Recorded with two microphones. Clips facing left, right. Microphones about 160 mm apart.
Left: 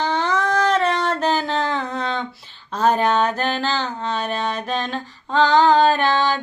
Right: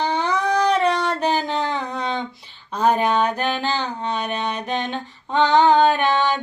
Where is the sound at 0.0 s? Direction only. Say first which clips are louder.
Even; 15° right (ahead or behind).